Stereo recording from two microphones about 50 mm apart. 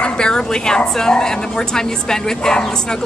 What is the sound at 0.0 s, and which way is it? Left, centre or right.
A woman's voice, centre.